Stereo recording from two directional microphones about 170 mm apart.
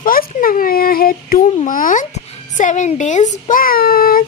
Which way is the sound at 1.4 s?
50° left (ahead or behind).